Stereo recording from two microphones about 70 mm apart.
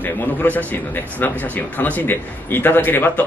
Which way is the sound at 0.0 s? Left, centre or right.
Left.